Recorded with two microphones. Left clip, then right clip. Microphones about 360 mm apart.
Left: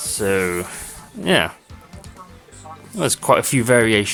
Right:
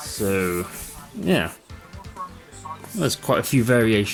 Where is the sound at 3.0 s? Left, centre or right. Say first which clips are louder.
Left 6 dB; left.